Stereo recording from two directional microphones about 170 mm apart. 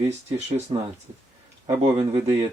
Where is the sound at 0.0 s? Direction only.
40° right (ahead or behind).